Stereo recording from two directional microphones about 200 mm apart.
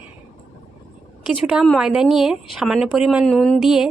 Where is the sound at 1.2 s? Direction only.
5° right (ahead or behind).